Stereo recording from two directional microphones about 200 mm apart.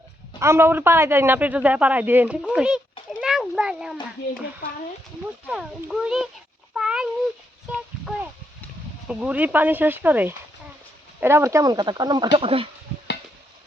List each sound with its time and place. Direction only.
0.3 s speech: 15° right (ahead or behind)
3.2 s a sound: 5° right (ahead or behind)
5.5 s a child's voice: 5° right (ahead or behind)
6.7 s cat: 5° right (ahead or behind)
7.7 s a sound: centre (ahead or behind)
9.0 s speech: 5° right (ahead or behind); by 12.6 s 30° right (ahead or behind)